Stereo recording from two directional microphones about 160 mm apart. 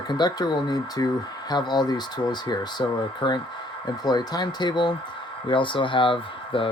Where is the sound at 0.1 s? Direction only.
25° left (ahead or behind).